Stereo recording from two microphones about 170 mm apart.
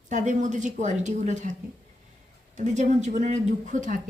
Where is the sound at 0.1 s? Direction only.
45° right (ahead or behind).